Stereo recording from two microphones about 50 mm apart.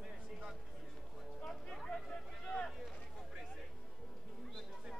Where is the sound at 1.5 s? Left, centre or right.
Centre.